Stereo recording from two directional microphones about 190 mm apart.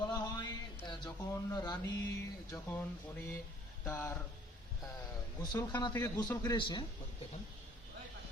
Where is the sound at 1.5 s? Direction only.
20° left (ahead or behind).